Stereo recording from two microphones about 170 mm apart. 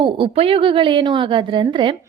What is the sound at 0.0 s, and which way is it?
A woman's voice, 30° right (ahead or behind).